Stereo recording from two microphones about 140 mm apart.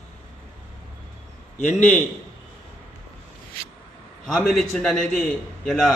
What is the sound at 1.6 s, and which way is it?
Speech, 55° left (ahead or behind).